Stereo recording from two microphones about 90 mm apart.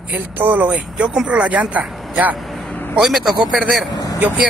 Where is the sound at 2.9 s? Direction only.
5° right (ahead or behind).